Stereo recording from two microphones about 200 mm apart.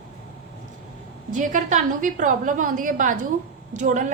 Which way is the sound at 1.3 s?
40° right (ahead or behind).